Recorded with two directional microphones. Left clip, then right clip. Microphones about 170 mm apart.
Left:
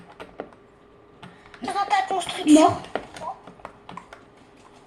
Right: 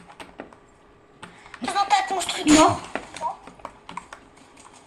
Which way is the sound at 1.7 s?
30° right (ahead or behind).